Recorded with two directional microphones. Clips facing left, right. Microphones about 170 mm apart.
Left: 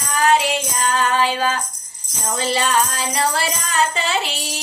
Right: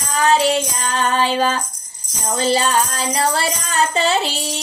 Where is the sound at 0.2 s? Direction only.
30° right (ahead or behind).